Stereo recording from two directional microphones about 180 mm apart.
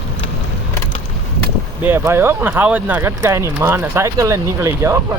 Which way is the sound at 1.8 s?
15° right (ahead or behind).